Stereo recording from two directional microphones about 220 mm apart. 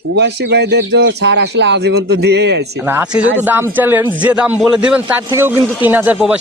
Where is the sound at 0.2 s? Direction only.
50° right (ahead or behind).